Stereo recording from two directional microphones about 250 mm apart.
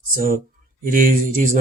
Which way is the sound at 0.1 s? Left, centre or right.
Right.